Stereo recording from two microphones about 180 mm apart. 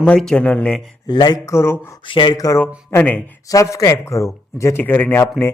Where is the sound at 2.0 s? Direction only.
25° left (ahead or behind).